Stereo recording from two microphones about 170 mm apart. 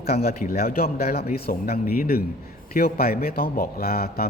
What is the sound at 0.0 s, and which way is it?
A man's voice, 65° left (ahead or behind).